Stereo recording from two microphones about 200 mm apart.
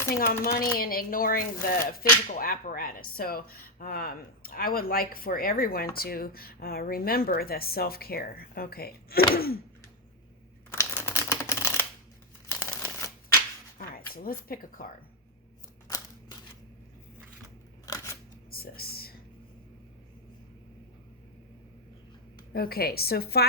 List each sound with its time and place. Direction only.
0.2 s speech: 45° left (ahead or behind)
11.1 s typewriter: 15° left (ahead or behind)
12.5 s a sound: 10° left (ahead or behind)
13.7 s speech: 45° left (ahead or behind)
17.8 s scissors: 15° left (ahead or behind)
18.5 s a sound: 50° left (ahead or behind)
22.5 s speech: 50° left (ahead or behind)